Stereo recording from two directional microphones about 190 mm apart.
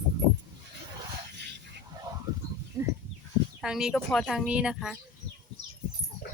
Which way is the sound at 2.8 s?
20° right (ahead or behind).